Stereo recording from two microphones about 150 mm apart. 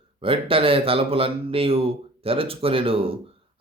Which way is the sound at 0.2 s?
35° right (ahead or behind).